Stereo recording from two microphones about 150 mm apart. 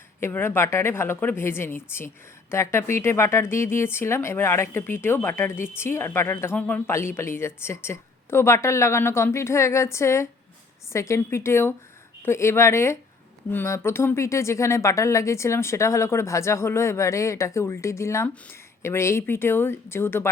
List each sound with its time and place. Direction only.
0.2 s a woman's voice: 15° left (ahead or behind)